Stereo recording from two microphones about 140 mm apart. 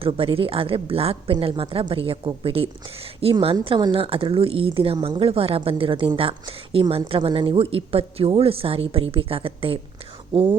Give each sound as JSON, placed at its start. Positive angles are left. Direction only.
{"t": 0.0, "sound": "a woman's voice", "side_deg": -40}